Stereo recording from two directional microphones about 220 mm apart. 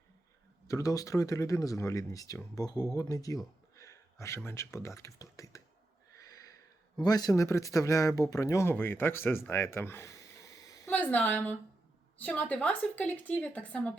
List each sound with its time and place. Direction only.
0.7 s speech: 15° left (ahead or behind)
6.1 s a sound: 15° left (ahead or behind)
7.0 s speech: 15° left (ahead or behind)